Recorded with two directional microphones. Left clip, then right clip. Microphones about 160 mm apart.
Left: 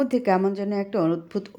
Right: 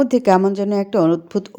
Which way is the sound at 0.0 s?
25° right (ahead or behind).